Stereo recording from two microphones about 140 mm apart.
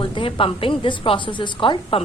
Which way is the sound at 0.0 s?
35° left (ahead or behind).